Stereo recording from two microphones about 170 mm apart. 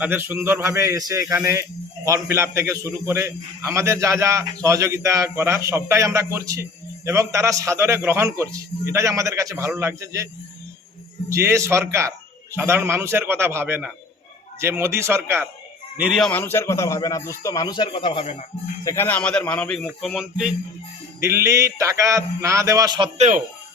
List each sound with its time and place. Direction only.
0.0 s a man's voice: 10° right (ahead or behind)
11.3 s a man's voice: 15° right (ahead or behind)
16.0 s speech: 5° right (ahead or behind)
16.3 s speech: 15° left (ahead or behind); by 18.4 s 35° left (ahead or behind)
18.9 s a man's voice: 10° left (ahead or behind)
21.2 s a man's voice: 15° right (ahead or behind)
23.1 s speech: 45° right (ahead or behind)